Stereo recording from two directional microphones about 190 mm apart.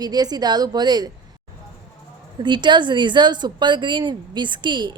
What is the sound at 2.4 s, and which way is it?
Speech, 25° right (ahead or behind).